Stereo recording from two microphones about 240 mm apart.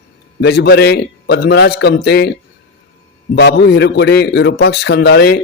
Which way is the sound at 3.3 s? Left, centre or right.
Left.